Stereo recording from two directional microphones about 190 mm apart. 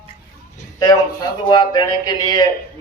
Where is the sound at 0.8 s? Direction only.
20° left (ahead or behind).